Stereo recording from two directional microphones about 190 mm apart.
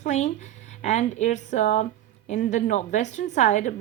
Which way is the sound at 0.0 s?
35° left (ahead or behind).